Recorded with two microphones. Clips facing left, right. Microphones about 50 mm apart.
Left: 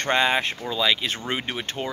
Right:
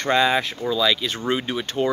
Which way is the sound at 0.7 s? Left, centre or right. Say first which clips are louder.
Right 3 dB; centre.